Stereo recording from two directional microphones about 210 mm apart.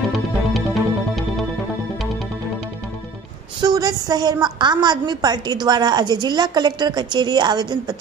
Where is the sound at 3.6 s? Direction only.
20° right (ahead or behind).